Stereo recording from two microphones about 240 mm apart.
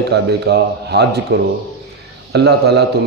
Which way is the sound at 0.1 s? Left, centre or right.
Right.